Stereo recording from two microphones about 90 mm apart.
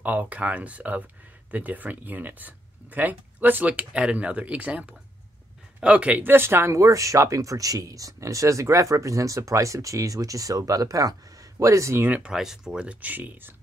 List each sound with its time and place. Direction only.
0.0 s speech: 20° right (ahead or behind)
12.1 s speech: 10° right (ahead or behind)